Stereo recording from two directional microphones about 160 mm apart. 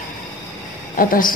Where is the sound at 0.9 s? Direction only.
60° left (ahead or behind).